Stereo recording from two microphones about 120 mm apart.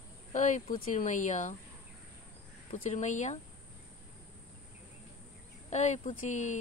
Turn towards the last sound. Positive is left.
turn(degrees=85)